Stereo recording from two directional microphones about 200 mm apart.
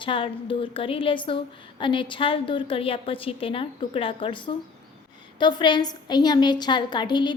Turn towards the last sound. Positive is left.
turn(degrees=20)  # may be behind; listen again after turning